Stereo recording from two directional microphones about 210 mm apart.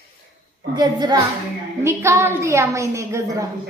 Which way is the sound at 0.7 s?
20° right (ahead or behind).